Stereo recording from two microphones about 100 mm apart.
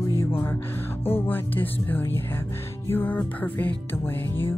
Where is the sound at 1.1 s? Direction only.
20° left (ahead or behind).